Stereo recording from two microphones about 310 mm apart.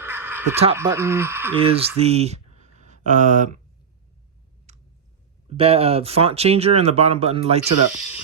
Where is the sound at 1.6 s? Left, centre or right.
Centre.